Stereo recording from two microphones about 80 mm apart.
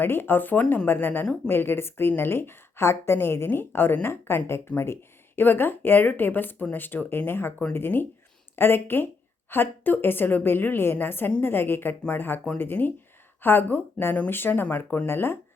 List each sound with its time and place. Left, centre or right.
0.0 s a woman's voice: left